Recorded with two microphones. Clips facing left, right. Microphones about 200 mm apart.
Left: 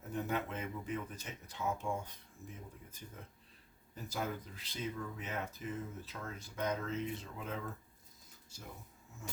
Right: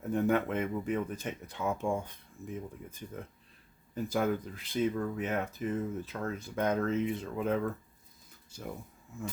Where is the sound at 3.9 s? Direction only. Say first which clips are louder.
Right 10 dB; 55° right (ahead or behind).